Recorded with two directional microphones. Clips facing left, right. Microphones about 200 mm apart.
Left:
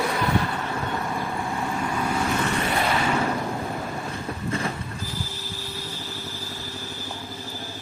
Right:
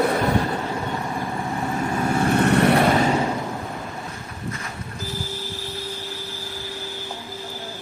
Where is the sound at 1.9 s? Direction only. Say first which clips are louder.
Right 7 dB; 45° right (ahead or behind); by 2.8 s 70° right (ahead or behind).